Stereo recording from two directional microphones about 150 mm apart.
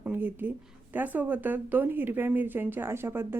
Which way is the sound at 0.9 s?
10° right (ahead or behind).